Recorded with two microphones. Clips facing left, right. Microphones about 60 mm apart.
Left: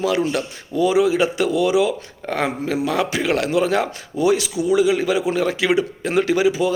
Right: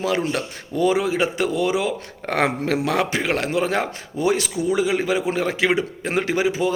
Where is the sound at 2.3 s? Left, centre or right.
Right.